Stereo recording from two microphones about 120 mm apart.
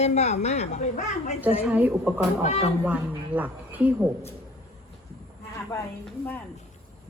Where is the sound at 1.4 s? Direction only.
15° right (ahead or behind).